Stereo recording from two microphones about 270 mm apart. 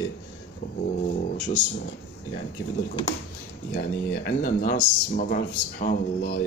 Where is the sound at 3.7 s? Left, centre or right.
Left.